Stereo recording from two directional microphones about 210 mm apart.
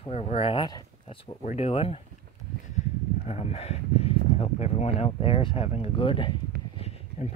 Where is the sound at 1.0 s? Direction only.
30° left (ahead or behind).